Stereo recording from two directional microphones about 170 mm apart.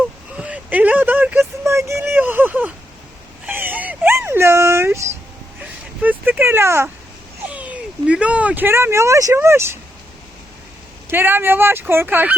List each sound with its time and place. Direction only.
0.3 s a sound: 5° right (ahead or behind)
6.0 s speech: 10° right (ahead or behind)
11.1 s speech: 15° right (ahead or behind)